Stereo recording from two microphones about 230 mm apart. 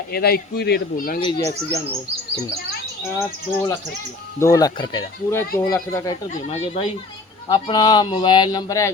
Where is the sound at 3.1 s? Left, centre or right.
Centre.